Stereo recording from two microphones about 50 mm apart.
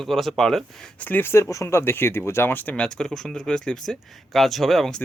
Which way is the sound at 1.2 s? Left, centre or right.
Left.